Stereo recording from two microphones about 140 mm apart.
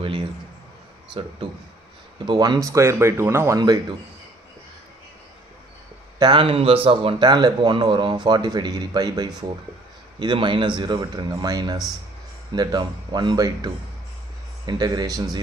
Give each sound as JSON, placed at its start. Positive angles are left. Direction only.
{"t": 2.2, "sound": "speech", "side_deg": -30}
{"t": 6.1, "sound": "speech", "side_deg": -35}
{"t": 14.7, "sound": "speech", "side_deg": -30}